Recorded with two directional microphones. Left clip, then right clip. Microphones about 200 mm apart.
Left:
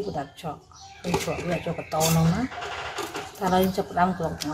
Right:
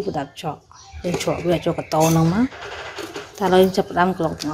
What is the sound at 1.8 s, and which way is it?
Speech, 40° right (ahead or behind).